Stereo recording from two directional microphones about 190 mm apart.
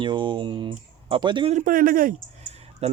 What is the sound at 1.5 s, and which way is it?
Speech, 45° right (ahead or behind).